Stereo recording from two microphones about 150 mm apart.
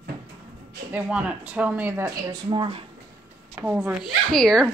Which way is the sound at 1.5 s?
10° right (ahead or behind).